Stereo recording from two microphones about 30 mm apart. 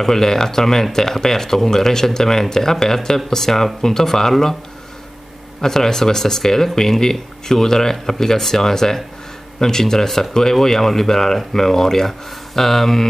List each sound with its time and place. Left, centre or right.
0.0 s speech: centre
5.6 s speech: centre